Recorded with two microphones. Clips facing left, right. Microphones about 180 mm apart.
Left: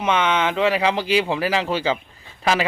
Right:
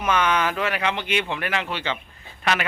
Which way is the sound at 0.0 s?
25° left (ahead or behind).